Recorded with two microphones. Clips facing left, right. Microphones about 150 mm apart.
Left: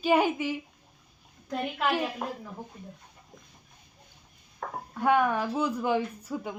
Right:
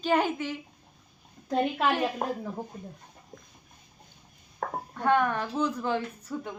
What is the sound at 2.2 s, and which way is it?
Speech, 45° right (ahead or behind).